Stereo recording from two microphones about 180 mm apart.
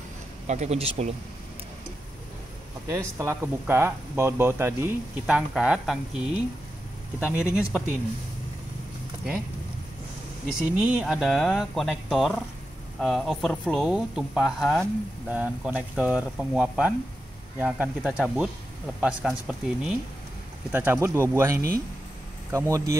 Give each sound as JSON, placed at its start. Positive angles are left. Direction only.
{"t": 0.5, "sound": "speech", "side_deg": -40}
{"t": 2.9, "sound": "speech", "side_deg": -15}
{"t": 5.2, "sound": "speech", "side_deg": -5}
{"t": 7.2, "sound": "speech", "side_deg": 15}
{"t": 10.4, "sound": "speech", "side_deg": -5}